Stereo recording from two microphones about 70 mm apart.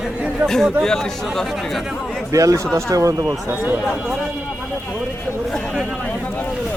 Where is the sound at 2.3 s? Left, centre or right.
Right.